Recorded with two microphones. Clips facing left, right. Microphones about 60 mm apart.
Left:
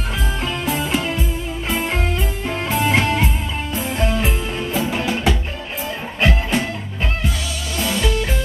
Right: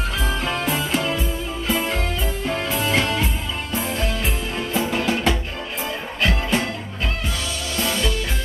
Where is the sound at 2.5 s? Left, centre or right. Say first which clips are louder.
Left 4 dB; left.